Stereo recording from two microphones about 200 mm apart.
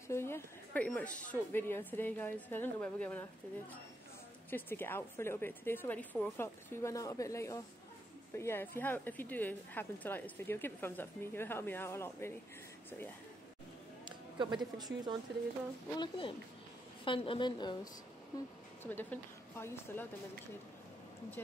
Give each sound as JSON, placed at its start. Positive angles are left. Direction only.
{"t": 0.1, "sound": "a woman's voice", "side_deg": 10}
{"t": 4.5, "sound": "a woman's voice", "side_deg": 10}
{"t": 14.0, "sound": "a sound", "side_deg": -25}
{"t": 14.8, "sound": "speech", "side_deg": -20}
{"t": 16.0, "sound": "a woman's voice", "side_deg": 25}
{"t": 18.8, "sound": "a woman's voice", "side_deg": 10}